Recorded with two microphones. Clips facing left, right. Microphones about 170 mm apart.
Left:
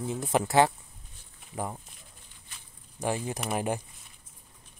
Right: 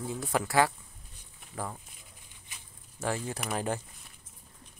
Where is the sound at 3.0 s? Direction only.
15° left (ahead or behind).